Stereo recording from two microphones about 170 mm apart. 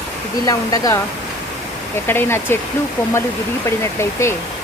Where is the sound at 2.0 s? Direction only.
15° left (ahead or behind).